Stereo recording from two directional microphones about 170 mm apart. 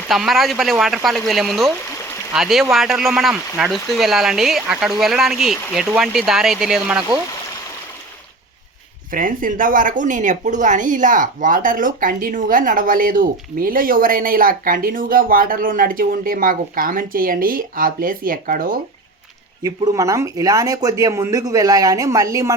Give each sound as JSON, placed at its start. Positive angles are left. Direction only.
{"t": 0.1, "sound": "speech", "side_deg": 0}
{"t": 9.1, "sound": "speech", "side_deg": -55}
{"t": 19.6, "sound": "speech", "side_deg": -20}